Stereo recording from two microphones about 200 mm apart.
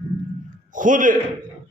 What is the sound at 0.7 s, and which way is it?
Speech, 40° right (ahead or behind).